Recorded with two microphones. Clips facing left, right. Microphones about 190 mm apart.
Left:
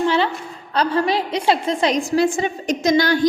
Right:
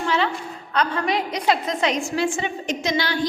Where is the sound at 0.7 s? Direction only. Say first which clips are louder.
Left 4 dB; 30° left (ahead or behind).